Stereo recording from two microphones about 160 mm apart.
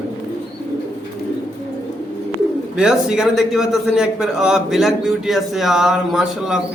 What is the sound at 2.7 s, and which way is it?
A man's voice, 5° right (ahead or behind).